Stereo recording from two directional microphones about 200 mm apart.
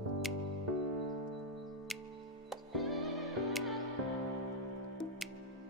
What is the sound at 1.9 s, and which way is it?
Music, centre (ahead or behind).